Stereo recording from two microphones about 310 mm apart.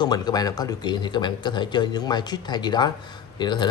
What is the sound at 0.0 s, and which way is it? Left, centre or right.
Speech, centre.